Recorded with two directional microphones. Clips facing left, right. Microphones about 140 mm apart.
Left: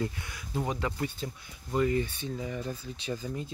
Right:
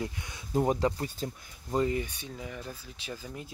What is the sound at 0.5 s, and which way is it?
Speech, 45° right (ahead or behind).